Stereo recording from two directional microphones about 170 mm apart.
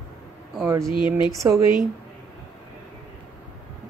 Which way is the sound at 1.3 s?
20° right (ahead or behind).